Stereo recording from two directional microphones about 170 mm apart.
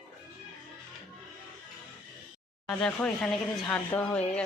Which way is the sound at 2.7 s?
5° left (ahead or behind).